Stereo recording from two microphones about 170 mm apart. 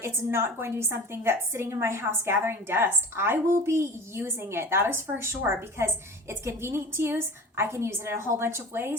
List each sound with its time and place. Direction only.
0.0 s a woman's voice: 15° right (ahead or behind)